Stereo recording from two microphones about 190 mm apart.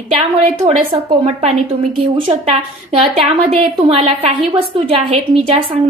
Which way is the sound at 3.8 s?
30° right (ahead or behind).